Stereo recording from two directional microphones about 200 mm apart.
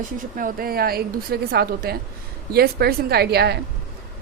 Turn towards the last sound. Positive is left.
turn(degrees=-55)  # may be behind; listen again after turning